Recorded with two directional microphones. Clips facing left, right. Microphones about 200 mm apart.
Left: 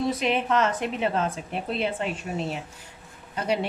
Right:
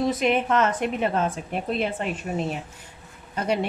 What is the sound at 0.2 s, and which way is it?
A woman's voice, 50° right (ahead or behind).